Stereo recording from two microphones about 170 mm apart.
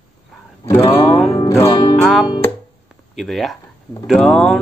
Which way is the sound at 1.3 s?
20° left (ahead or behind).